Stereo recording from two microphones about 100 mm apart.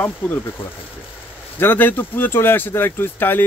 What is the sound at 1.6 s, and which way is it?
Speech, 20° left (ahead or behind).